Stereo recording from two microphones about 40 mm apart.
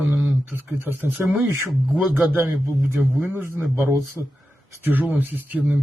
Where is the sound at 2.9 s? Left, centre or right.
Right.